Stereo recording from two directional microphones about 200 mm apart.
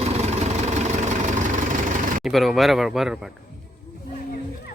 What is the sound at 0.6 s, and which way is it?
Vehicle, 35° right (ahead or behind).